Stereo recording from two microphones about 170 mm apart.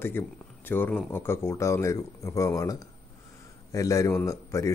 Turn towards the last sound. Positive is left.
turn(degrees=20)  # may be behind; listen again after turning